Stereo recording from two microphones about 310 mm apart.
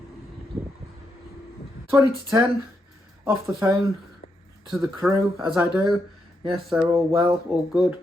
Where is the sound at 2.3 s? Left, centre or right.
Centre.